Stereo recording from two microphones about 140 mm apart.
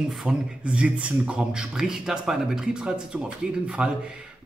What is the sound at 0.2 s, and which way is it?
A man's voice, 5° right (ahead or behind).